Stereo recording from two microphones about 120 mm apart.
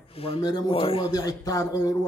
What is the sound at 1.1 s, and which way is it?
Speech, 30° left (ahead or behind).